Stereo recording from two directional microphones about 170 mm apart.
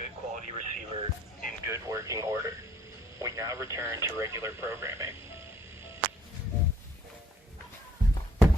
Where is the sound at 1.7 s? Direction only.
20° right (ahead or behind).